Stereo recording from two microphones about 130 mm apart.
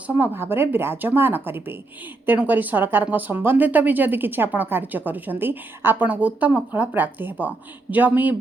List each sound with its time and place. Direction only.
0.2 s speech: 15° right (ahead or behind)